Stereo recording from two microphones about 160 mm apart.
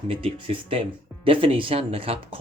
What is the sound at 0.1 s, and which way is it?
Speech, 35° right (ahead or behind).